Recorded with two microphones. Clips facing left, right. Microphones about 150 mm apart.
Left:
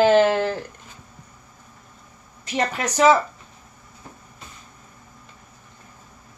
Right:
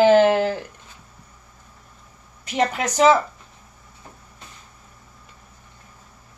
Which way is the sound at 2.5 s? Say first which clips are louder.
Right 2 dB; 15° right (ahead or behind).